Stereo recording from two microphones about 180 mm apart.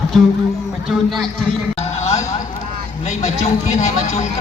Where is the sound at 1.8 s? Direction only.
35° left (ahead or behind).